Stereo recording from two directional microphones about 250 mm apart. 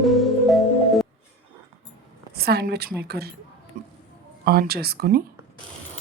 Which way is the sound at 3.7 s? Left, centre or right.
Right.